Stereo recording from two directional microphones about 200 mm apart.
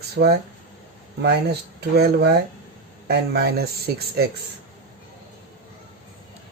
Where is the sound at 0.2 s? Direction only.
60° right (ahead or behind).